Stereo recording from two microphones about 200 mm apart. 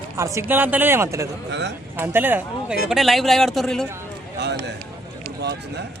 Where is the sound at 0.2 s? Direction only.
15° right (ahead or behind).